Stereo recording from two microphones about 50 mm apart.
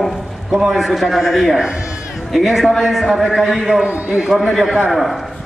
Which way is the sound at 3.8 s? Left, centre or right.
Right.